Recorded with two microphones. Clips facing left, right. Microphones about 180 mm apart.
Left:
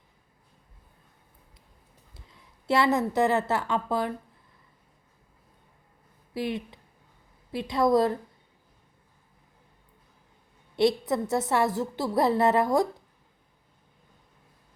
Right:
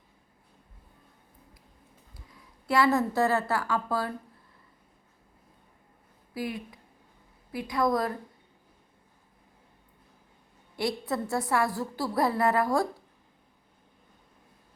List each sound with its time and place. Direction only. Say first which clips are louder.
2.1 s a woman's voice: right 1 dB; 25° left (ahead or behind)
6.3 s a woman's voice: left 3 dB; 25° left (ahead or behind)
10.8 s a woman's voice: left 6 dB; 20° left (ahead or behind)